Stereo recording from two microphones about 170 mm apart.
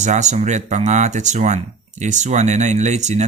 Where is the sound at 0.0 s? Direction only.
45° right (ahead or behind).